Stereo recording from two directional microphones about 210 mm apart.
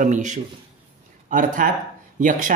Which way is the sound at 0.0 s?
35° right (ahead or behind).